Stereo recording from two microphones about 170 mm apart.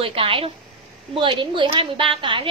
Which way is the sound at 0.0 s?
30° right (ahead or behind).